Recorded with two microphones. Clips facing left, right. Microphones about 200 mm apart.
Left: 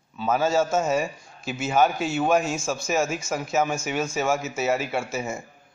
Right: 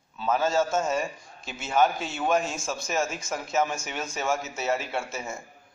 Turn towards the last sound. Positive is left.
turn(degrees=5)  # may be behind; listen again after turning